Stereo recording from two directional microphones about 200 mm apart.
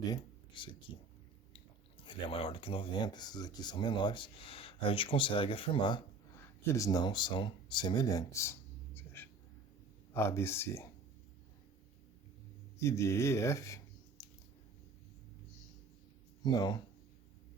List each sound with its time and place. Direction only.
0.0 s speech: 20° left (ahead or behind)
2.0 s speech: 25° left (ahead or behind)
9.0 s a sound: 10° left (ahead or behind)
10.1 s speech: 10° left (ahead or behind)
12.8 s speech: 15° left (ahead or behind)
14.2 s a sound: 20° left (ahead or behind)
16.4 s speech: 20° left (ahead or behind)